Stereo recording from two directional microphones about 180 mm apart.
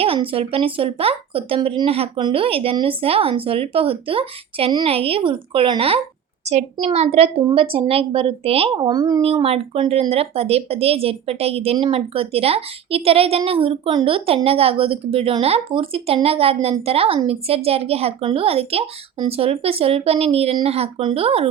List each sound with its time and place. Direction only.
0.0 s speech: 30° right (ahead or behind)